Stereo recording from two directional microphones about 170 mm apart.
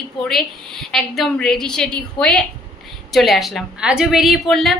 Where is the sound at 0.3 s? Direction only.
Centre (ahead or behind).